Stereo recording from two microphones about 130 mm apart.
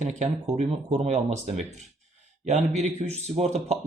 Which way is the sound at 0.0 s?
65° right (ahead or behind).